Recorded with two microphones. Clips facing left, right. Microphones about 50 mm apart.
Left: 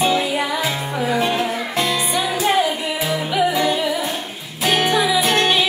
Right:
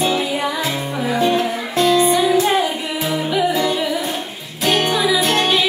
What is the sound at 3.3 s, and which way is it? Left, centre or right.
Music, centre.